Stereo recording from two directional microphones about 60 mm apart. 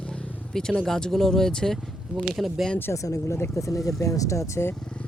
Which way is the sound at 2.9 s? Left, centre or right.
Left.